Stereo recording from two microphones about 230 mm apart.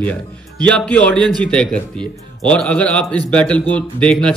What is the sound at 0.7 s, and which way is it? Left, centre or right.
Speech, centre.